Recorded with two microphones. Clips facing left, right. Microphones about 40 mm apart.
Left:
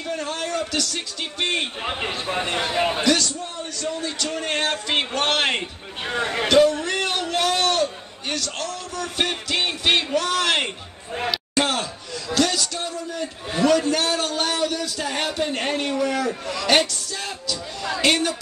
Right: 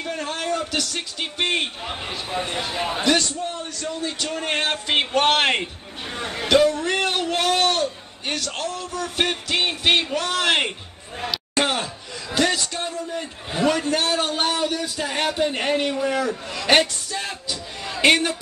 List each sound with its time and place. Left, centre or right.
0.0 s a man's voice: centre
1.8 s speech: left
2.7 s a man's voice: left
3.0 s speech: right
4.5 s a man's voice: centre
8.4 s speech: right
9.0 s a man's voice: centre
11.6 s a sound: centre
12.7 s a man's voice: right